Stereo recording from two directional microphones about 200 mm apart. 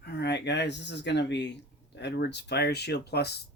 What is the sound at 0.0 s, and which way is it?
Speech, 55° left (ahead or behind).